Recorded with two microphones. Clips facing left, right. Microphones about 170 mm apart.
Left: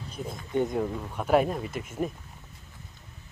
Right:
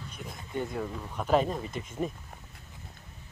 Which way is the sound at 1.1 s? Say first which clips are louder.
Left 2 dB; 10° left (ahead or behind).